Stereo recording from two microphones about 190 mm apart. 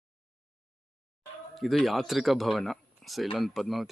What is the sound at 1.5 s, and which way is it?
Speech, centre (ahead or behind).